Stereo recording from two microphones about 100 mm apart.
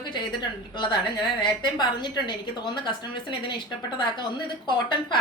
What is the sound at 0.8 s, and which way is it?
A woman's voice, 50° left (ahead or behind).